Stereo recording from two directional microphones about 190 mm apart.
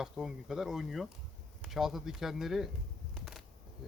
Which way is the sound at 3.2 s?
Centre (ahead or behind).